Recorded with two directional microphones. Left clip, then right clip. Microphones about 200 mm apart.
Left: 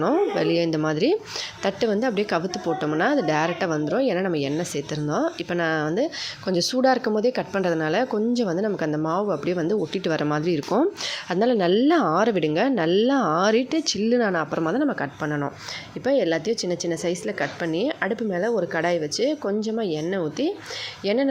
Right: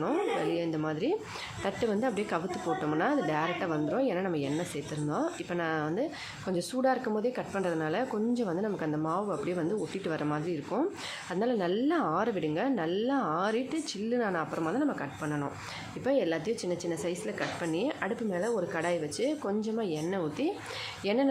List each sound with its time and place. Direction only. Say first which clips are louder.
0.0 s a woman's voice: left 9 dB; 30° left (ahead or behind)